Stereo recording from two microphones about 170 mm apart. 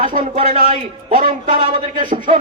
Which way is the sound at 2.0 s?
50° right (ahead or behind).